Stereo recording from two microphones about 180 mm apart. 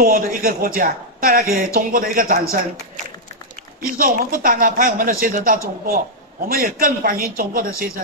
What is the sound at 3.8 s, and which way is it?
A man's voice, 50° right (ahead or behind).